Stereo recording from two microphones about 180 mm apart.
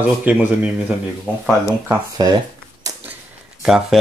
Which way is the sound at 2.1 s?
20° right (ahead or behind).